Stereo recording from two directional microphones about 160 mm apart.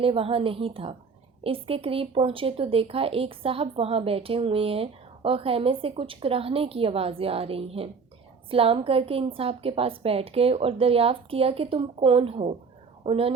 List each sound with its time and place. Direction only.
0.0 s speech: 35° right (ahead or behind)